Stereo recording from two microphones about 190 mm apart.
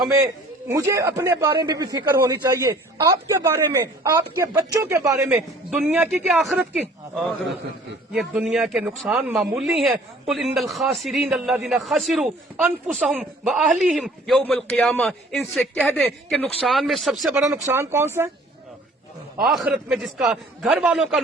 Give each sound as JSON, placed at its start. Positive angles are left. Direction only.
{"t": 0.7, "sound": "a man's voice", "side_deg": -15}
{"t": 5.7, "sound": "a man's voice", "side_deg": -5}
{"t": 17.5, "sound": "a man's voice", "side_deg": -10}
{"t": 19.4, "sound": "a man's voice", "side_deg": 0}